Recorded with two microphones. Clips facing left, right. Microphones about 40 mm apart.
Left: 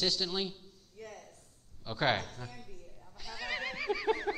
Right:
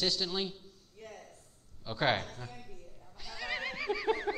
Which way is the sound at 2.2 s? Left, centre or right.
Right.